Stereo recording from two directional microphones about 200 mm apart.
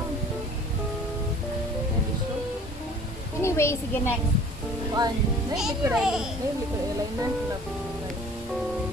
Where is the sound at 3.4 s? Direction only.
15° left (ahead or behind).